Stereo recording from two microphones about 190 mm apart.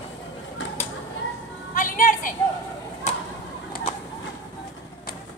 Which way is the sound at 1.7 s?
45° left (ahead or behind).